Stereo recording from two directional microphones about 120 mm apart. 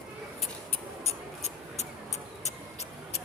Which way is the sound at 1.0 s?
65° left (ahead or behind).